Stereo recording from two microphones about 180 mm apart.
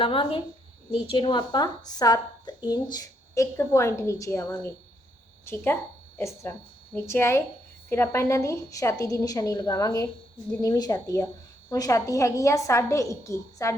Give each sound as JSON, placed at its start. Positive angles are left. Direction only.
{"t": 0.0, "sound": "a woman's voice", "side_deg": 30}
{"t": 4.4, "sound": "a woman's voice", "side_deg": 5}